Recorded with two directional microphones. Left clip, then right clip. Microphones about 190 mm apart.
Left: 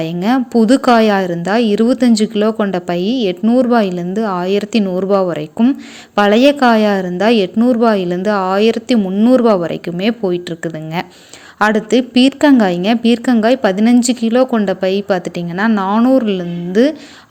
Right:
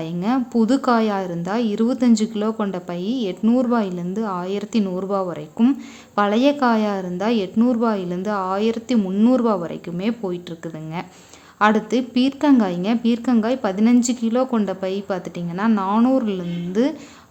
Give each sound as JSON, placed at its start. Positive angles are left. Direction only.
{"t": 0.0, "sound": "a woman's voice", "side_deg": 20}